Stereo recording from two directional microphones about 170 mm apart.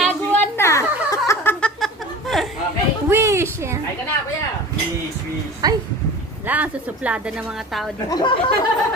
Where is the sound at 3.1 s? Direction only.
15° right (ahead or behind).